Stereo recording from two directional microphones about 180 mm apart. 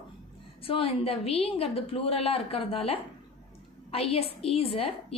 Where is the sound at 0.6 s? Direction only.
30° left (ahead or behind).